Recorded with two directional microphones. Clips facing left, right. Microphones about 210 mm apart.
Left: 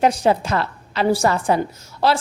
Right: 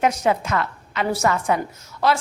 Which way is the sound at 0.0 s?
30° left (ahead or behind).